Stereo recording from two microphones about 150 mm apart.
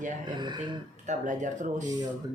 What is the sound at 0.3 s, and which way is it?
Speech, 30° right (ahead or behind).